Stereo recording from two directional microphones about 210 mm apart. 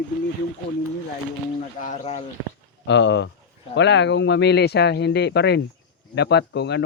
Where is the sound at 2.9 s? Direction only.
55° left (ahead or behind).